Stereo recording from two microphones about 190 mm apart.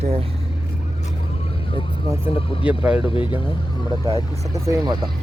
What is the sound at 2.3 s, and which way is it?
Speech, 30° left (ahead or behind).